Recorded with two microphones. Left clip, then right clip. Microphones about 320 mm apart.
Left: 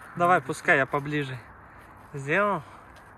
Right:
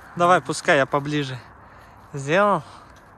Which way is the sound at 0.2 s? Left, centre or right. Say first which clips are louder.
Right 5 dB; centre.